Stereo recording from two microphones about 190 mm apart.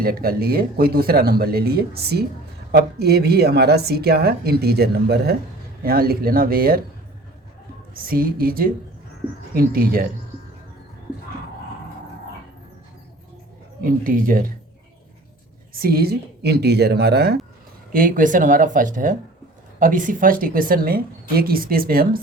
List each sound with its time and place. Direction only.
0.0 s a woman's voice: 50° right (ahead or behind)
7.9 s a woman's voice: 50° right (ahead or behind)
13.8 s a woman's voice: 45° right (ahead or behind)
15.7 s a woman's voice: 50° right (ahead or behind)
17.9 s a woman's voice: 45° right (ahead or behind)